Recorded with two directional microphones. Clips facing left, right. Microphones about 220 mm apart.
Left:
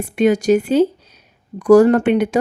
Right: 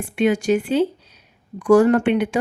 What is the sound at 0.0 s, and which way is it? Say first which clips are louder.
Speech: left 4 dB; 40° left (ahead or behind).